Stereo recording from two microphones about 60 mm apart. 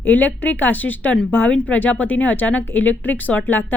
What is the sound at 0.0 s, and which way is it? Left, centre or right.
Speech, left.